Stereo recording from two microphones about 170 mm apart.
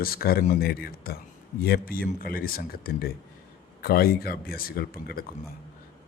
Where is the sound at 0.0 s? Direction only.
60° left (ahead or behind).